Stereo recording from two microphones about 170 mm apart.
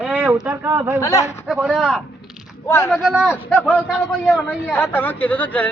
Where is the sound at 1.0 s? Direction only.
20° left (ahead or behind).